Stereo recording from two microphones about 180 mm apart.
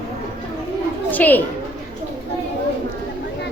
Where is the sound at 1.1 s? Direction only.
10° left (ahead or behind).